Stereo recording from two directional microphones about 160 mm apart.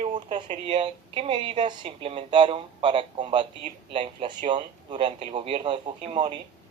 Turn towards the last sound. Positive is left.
turn(degrees=-35)  # may be behind; listen again after turning